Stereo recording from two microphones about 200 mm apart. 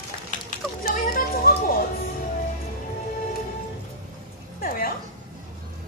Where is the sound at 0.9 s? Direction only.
45° left (ahead or behind).